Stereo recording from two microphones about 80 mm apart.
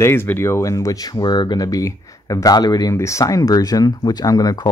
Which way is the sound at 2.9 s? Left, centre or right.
Left.